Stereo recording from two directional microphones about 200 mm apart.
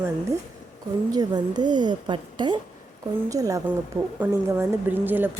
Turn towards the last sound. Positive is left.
turn(degrees=-10)  # may be behind; listen again after turning